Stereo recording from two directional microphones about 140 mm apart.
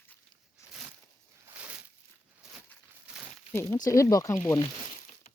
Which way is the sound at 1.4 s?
10° right (ahead or behind).